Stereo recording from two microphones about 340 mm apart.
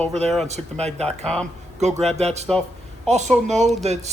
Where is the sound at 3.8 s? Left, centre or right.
Centre.